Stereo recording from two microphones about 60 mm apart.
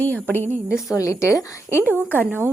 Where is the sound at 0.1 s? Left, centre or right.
Left.